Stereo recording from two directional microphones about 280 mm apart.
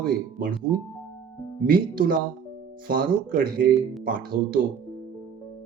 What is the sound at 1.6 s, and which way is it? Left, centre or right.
Speech, right.